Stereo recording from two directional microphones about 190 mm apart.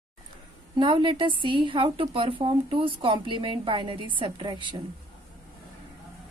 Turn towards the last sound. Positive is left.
turn(degrees=-25)  # may be behind; listen again after turning